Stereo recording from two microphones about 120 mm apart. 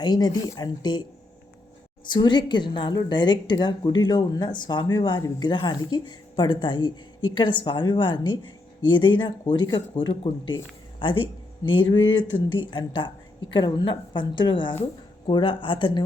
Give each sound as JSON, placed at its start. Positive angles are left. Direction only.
{"t": 0.0, "sound": "a woman's voice", "side_deg": 35}
{"t": 2.0, "sound": "a woman's voice", "side_deg": 40}